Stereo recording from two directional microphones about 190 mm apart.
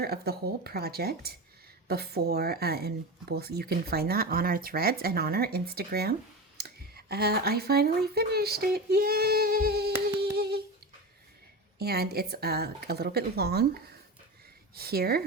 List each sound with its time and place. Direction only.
0.0 s speech: 55° right (ahead or behind)
10.2 s humming: 55° right (ahead or behind)
11.8 s speech: 55° right (ahead or behind)
14.8 s speech: 55° right (ahead or behind)